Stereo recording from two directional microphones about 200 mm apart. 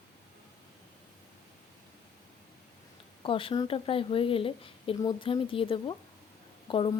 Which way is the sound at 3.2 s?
25° left (ahead or behind).